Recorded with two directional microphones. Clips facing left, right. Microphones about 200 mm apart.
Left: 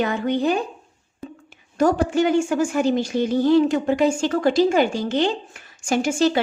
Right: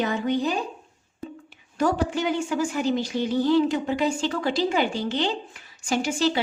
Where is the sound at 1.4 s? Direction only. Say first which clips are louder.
Left 5 dB; 45° left (ahead or behind).